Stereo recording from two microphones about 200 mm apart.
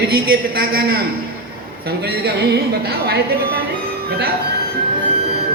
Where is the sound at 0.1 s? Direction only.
50° right (ahead or behind).